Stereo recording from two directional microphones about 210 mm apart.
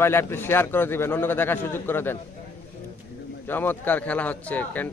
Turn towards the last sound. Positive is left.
turn(degrees=10)  # may be behind; listen again after turning